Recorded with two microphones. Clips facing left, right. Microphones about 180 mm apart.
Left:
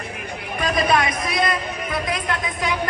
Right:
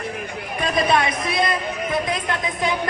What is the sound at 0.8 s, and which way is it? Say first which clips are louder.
Speech: right 1 dB; 25° right (ahead or behind).